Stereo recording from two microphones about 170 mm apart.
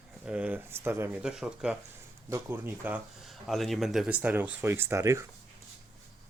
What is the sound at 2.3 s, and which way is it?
Speech, 15° right (ahead or behind).